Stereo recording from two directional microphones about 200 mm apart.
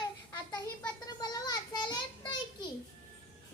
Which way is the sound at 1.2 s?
20° left (ahead or behind).